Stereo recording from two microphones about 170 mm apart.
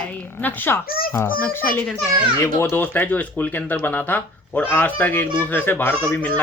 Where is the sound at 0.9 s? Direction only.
60° left (ahead or behind).